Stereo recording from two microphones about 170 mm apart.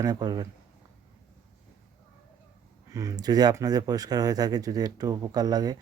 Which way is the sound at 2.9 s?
20° right (ahead or behind).